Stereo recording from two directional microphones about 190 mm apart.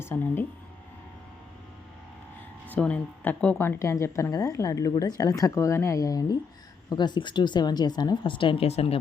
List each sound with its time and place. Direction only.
0.0 s speech: 10° left (ahead or behind)
2.6 s speech: 5° left (ahead or behind); by 9.0 s 30° left (ahead or behind)